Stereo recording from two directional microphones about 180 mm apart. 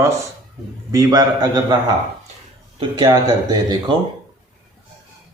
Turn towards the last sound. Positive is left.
turn(degrees=-20)  # may be behind; listen again after turning